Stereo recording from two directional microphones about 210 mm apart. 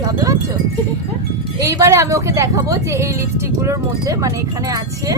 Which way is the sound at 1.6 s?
15° right (ahead or behind).